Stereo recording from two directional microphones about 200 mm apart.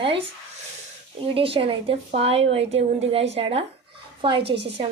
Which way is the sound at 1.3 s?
25° right (ahead or behind).